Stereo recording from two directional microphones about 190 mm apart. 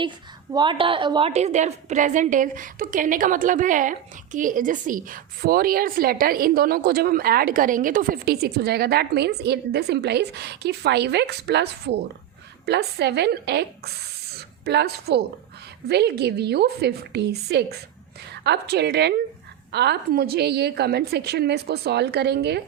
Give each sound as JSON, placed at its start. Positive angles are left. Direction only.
{"t": 0.5, "sound": "a woman's voice", "side_deg": -25}